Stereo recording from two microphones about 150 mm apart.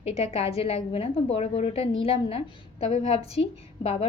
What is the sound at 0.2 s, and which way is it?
A woman's voice, 40° left (ahead or behind).